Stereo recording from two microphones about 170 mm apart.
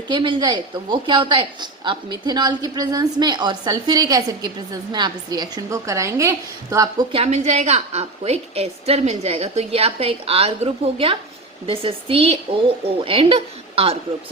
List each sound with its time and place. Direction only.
0.1 s speech: 30° right (ahead or behind)
7.1 s a woman's voice: 40° right (ahead or behind)